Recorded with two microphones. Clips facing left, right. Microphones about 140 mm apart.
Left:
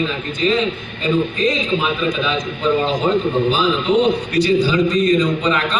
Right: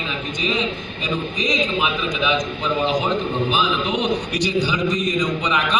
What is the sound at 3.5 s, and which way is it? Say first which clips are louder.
A man's voice: left 5 dB; 15° right (ahead or behind).